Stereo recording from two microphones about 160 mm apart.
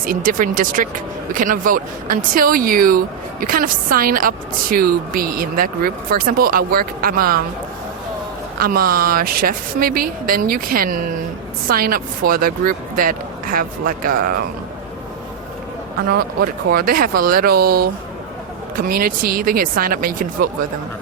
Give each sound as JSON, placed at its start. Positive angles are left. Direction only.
{"t": 0.0, "sound": "a woman's voice", "side_deg": -60}
{"t": 8.5, "sound": "a woman's voice", "side_deg": -65}
{"t": 16.0, "sound": "a woman's voice", "side_deg": -70}